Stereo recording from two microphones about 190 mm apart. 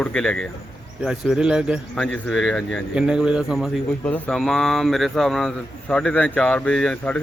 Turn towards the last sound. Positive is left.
turn(degrees=5)  # may be behind; listen again after turning